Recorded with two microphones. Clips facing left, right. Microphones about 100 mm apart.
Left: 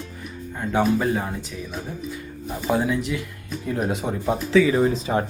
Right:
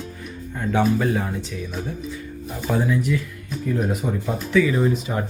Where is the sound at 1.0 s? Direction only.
20° left (ahead or behind).